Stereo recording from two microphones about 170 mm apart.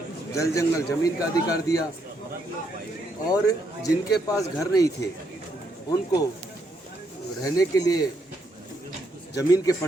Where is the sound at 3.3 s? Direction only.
20° left (ahead or behind).